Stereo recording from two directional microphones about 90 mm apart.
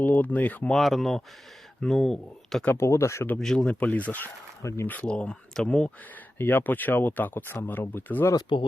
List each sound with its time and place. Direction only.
0.0 s speech: 20° left (ahead or behind)
0.7 s speech: centre (ahead or behind)
2.7 s speech: 30° left (ahead or behind)
3.3 s speech: 5° left (ahead or behind)
6.4 s speech: 20° left (ahead or behind)